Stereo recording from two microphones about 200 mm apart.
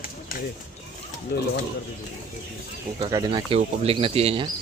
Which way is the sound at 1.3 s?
50° left (ahead or behind).